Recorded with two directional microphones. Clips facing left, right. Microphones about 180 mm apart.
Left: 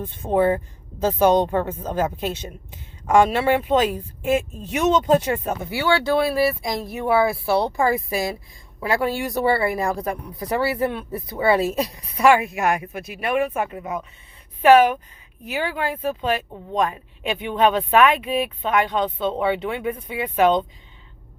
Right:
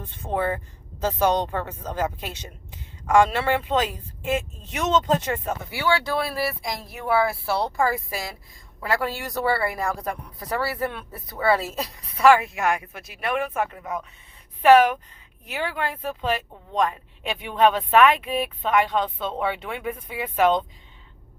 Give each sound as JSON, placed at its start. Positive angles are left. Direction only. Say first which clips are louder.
{"t": 0.0, "sound": "speech", "louder": "left 7 dB", "side_deg": 15}
{"t": 5.7, "sound": "speech", "louder": "left 5 dB", "side_deg": 30}